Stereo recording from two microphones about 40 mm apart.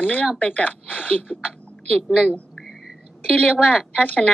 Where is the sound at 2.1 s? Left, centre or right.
Left.